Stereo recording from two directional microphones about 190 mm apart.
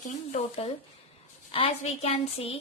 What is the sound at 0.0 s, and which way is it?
A woman's voice, 35° left (ahead or behind).